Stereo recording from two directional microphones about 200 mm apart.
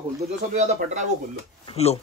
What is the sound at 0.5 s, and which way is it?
Speech, 35° right (ahead or behind).